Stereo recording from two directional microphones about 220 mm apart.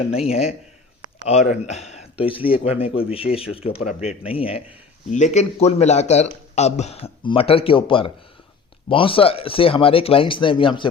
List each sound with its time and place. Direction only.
0.0 s speech: 30° left (ahead or behind)